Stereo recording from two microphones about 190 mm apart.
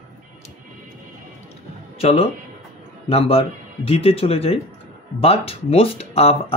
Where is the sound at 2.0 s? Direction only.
30° left (ahead or behind).